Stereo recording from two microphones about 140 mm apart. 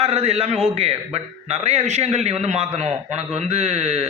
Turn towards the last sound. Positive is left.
turn(degrees=-50)  # may be behind; listen again after turning